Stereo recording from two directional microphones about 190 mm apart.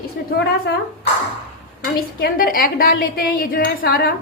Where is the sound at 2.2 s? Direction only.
50° left (ahead or behind).